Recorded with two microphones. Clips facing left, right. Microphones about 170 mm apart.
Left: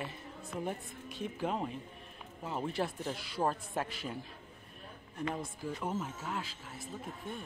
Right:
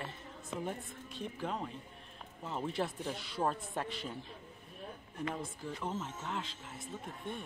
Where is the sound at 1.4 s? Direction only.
20° left (ahead or behind).